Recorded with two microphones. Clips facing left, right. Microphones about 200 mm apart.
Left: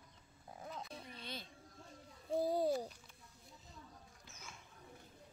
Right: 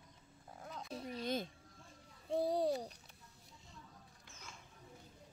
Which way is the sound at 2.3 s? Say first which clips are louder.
Even; 5° left (ahead or behind).